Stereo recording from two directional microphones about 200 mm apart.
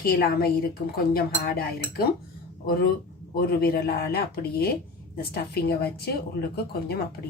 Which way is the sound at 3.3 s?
50° left (ahead or behind).